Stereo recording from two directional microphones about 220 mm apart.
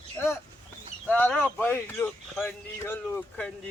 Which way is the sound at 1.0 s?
5° left (ahead or behind).